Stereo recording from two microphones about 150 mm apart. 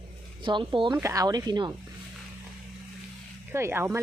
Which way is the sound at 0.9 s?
20° right (ahead or behind).